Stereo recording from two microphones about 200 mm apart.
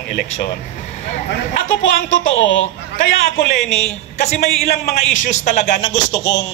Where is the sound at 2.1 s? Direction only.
70° left (ahead or behind).